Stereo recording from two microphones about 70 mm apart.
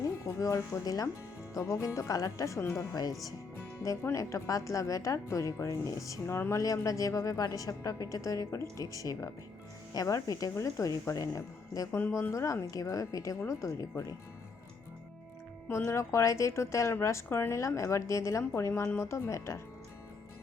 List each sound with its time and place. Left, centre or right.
0.0 s a woman's voice: left
2.9 s speech: left
4.1 s a woman's voice: left
6.2 s speech: left
6.6 s a woman's voice: left
12.3 s a woman's voice: left
12.7 s a woman's voice: left
15.7 s a woman's voice: left